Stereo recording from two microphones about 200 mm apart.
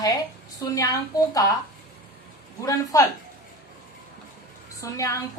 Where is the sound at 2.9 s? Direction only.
15° left (ahead or behind).